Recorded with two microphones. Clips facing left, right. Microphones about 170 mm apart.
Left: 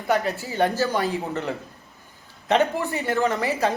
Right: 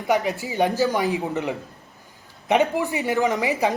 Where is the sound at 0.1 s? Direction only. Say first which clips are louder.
Right 1 dB; 15° right (ahead or behind).